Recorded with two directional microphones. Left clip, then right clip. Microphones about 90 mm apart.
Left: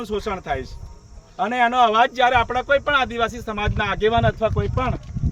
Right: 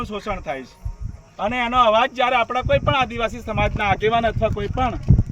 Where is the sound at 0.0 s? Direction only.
30° left (ahead or behind).